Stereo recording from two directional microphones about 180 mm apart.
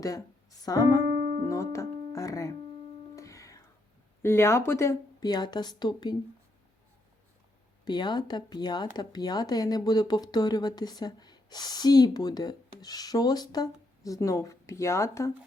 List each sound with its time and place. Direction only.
0.6 s speech: 20° left (ahead or behind)
1.5 s music: 15° left (ahead or behind)
4.2 s speech: 15° left (ahead or behind)
7.9 s speech: 25° left (ahead or behind)